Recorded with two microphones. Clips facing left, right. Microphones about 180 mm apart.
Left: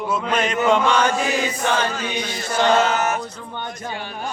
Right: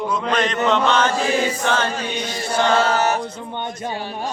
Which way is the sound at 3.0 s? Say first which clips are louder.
Right 3 dB; 35° right (ahead or behind).